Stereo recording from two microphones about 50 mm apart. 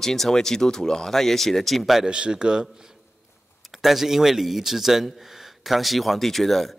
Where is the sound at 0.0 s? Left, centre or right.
Centre.